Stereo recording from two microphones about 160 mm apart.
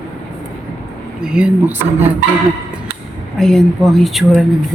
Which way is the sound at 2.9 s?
Centre (ahead or behind).